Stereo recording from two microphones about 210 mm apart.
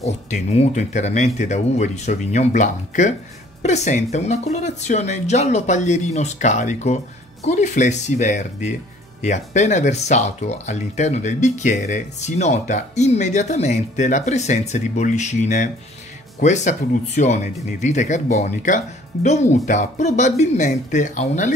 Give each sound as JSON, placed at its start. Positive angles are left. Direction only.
{"t": 0.0, "sound": "speech", "side_deg": 30}